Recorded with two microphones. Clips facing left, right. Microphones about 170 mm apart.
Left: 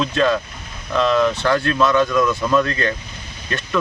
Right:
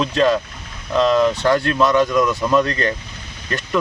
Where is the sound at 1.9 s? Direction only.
15° right (ahead or behind).